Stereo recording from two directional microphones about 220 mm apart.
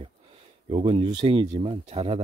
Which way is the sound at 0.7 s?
25° right (ahead or behind).